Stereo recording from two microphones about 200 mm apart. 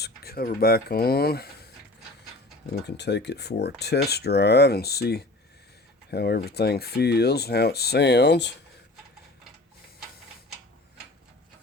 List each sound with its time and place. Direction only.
0.0 s speech: 50° left (ahead or behind)
2.8 s speech: 60° left (ahead or behind)